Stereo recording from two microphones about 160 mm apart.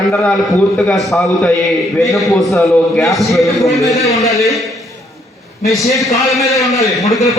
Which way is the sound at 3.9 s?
20° left (ahead or behind).